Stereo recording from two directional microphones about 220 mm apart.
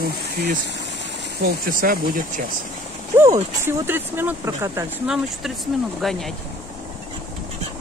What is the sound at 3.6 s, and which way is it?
Speech, 10° right (ahead or behind).